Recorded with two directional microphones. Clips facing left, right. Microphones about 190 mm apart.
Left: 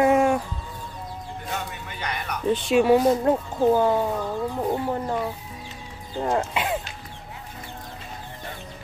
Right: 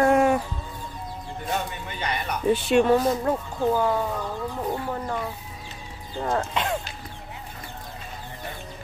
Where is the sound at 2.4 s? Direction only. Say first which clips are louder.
Right 1 dB; 10° right (ahead or behind).